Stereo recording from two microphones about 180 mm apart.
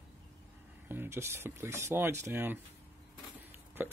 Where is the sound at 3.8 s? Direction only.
10° right (ahead or behind).